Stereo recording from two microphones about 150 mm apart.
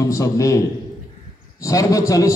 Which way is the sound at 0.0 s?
20° left (ahead or behind).